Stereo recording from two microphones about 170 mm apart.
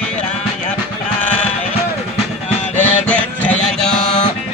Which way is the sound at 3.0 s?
10° left (ahead or behind).